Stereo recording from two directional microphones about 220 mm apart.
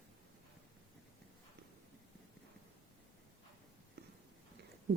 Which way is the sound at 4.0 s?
45° right (ahead or behind).